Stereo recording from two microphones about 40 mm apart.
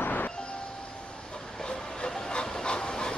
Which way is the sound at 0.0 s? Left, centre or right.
Left.